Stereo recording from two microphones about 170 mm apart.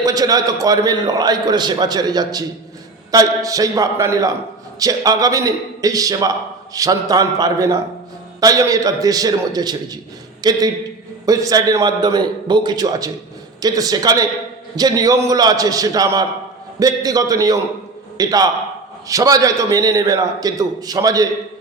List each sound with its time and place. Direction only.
0.0 s a man's voice: 20° right (ahead or behind)